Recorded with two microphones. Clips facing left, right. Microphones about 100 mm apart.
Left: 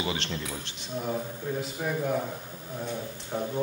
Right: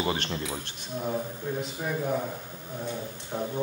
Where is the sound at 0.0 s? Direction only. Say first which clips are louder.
Right 2 dB; 45° right (ahead or behind).